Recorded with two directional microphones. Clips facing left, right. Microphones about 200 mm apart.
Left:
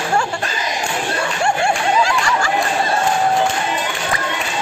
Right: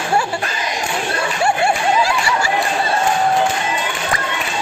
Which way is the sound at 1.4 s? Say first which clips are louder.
Right 1 dB; 5° right (ahead or behind).